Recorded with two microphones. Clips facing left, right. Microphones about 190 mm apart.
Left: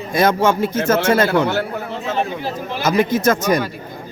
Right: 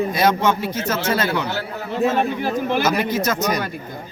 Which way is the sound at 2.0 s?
55° right (ahead or behind).